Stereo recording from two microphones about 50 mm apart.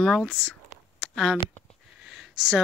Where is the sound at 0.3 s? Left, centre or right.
Centre.